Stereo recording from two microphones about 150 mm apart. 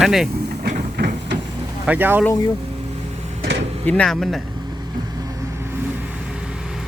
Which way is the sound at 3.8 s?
5° left (ahead or behind).